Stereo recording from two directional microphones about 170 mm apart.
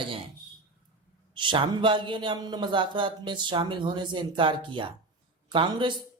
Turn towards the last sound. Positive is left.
turn(degrees=-30)  # may be behind; listen again after turning